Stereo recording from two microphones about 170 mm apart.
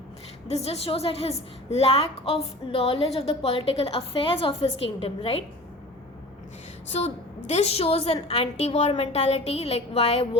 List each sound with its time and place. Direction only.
0.4 s a woman's voice: 40° left (ahead or behind)
6.9 s a woman's voice: 40° left (ahead or behind)